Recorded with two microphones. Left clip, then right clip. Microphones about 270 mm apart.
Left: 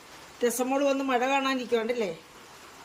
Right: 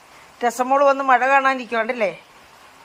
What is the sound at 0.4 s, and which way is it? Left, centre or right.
A man's voice, right.